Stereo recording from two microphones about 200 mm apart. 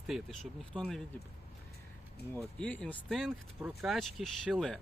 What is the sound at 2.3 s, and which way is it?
Speech, 5° left (ahead or behind).